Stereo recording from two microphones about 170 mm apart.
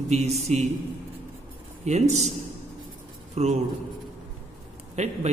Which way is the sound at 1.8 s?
40° right (ahead or behind).